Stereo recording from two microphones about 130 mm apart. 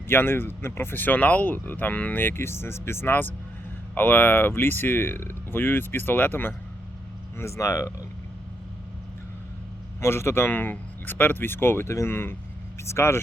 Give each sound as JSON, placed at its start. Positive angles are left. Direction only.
{"t": 0.1, "sound": "speech", "side_deg": 15}
{"t": 10.0, "sound": "speech", "side_deg": 20}